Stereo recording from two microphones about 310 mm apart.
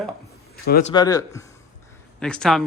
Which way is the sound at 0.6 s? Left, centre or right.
Left.